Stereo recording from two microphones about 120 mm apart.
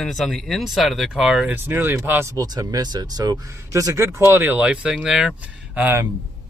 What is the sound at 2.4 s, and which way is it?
Speech, 30° right (ahead or behind).